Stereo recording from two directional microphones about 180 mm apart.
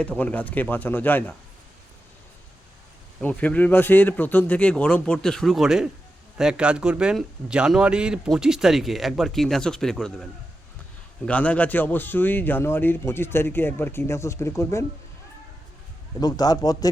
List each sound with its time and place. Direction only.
0.0 s a man's voice: 5° left (ahead or behind)
3.2 s a man's voice: 10° left (ahead or behind)
11.3 s a man's voice: 5° left (ahead or behind)
16.2 s a man's voice: 20° left (ahead or behind)